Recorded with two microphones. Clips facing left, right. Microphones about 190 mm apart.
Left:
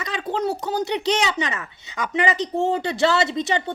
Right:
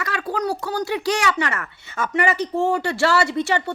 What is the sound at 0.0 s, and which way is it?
A woman's voice, 20° left (ahead or behind).